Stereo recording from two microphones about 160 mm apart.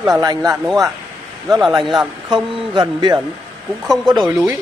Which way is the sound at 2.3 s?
30° right (ahead or behind).